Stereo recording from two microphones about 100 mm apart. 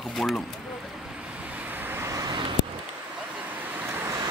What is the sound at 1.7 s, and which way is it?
Vehicle, 20° right (ahead or behind).